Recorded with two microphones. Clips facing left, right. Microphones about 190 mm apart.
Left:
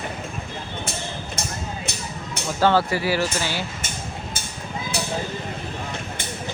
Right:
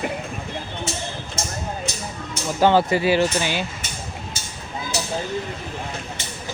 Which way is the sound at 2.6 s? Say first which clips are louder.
Right 3 dB; 15° right (ahead or behind).